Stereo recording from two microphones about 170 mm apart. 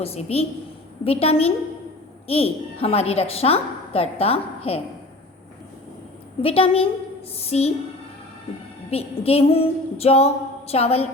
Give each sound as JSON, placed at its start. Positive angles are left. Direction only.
{"t": 0.0, "sound": "a woman's voice", "side_deg": 35}
{"t": 6.4, "sound": "a woman's voice", "side_deg": 35}
{"t": 8.9, "sound": "a woman's voice", "side_deg": 35}